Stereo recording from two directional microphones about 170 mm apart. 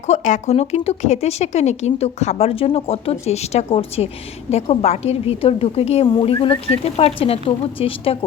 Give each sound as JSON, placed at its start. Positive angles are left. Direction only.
{"t": 0.1, "sound": "a woman's voice", "side_deg": 45}